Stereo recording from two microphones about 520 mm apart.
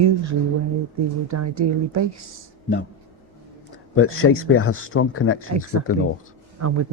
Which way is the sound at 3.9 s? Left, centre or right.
Left.